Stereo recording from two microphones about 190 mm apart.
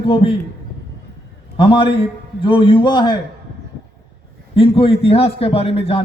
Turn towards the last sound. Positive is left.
turn(degrees=30)  # may be behind; listen again after turning